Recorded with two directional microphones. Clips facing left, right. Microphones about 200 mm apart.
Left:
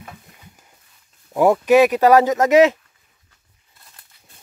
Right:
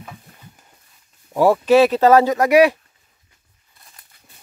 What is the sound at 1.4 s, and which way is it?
Speech, 15° left (ahead or behind).